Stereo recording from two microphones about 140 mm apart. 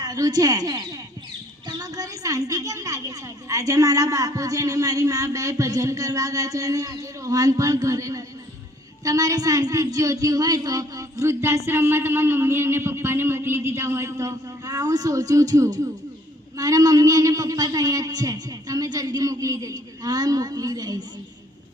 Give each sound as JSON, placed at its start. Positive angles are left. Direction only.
{"t": 0.0, "sound": "speech", "side_deg": -25}